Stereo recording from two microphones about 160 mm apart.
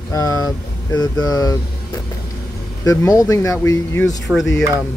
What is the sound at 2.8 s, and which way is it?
Speech, 20° left (ahead or behind).